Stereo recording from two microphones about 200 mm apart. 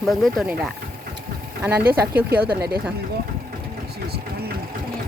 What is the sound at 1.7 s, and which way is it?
Speech, 50° right (ahead or behind).